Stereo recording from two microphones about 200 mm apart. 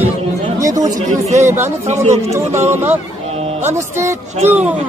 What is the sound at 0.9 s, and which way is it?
Speech, 35° right (ahead or behind).